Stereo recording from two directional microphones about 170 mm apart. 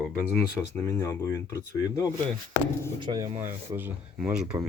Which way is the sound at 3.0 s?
25° right (ahead or behind).